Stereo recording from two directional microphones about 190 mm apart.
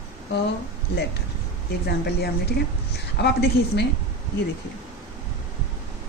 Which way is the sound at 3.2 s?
60° left (ahead or behind).